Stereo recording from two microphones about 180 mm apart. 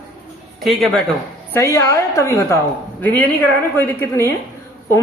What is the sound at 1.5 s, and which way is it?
A woman's voice, 15° left (ahead or behind).